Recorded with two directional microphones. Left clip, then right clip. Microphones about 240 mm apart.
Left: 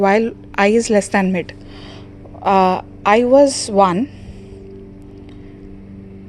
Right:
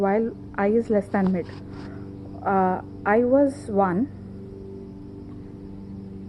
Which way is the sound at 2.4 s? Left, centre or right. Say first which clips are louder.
Left 9 dB; left.